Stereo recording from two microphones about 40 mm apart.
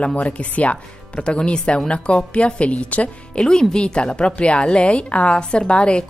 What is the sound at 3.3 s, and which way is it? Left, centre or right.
Speech, centre.